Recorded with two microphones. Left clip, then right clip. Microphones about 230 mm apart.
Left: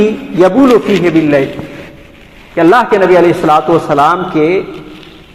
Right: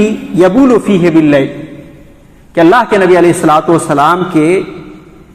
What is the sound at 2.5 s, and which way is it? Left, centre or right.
A man's voice, right.